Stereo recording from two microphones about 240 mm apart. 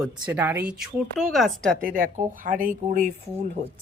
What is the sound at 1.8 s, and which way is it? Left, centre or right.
Speech, right.